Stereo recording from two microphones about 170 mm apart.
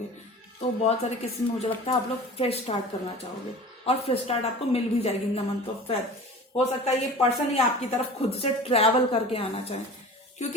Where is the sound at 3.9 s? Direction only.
35° left (ahead or behind).